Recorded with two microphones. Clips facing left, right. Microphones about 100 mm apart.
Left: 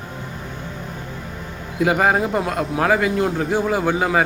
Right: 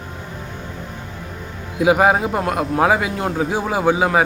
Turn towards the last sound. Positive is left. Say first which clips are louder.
# right 2 dB
turn(degrees=-5)  # may be behind; listen again after turning